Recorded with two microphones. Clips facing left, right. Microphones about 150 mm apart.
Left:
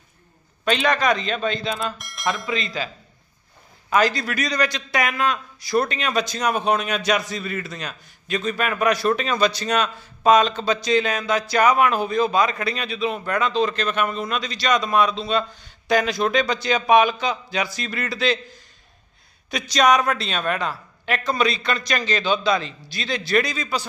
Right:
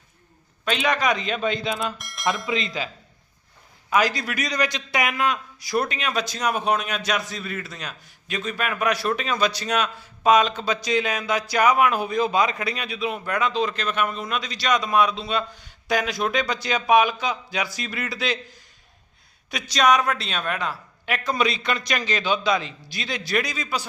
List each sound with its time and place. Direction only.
0.6 s a man's voice: 5° right (ahead or behind)
2.0 s speech: centre (ahead or behind)
2.5 s speech: 20° right (ahead or behind)
3.8 s a man's voice: 10° right (ahead or behind)
19.5 s a man's voice: 5° right (ahead or behind)